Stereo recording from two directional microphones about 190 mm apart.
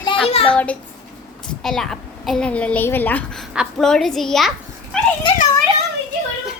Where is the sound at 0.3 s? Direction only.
30° left (ahead or behind).